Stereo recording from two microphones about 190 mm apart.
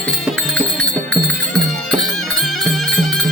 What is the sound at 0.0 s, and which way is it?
Music, 5° left (ahead or behind).